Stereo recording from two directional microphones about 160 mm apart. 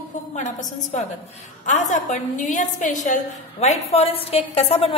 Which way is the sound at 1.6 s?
50° left (ahead or behind).